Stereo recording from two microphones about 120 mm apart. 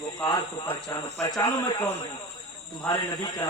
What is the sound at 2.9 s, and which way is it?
Speech, 35° left (ahead or behind).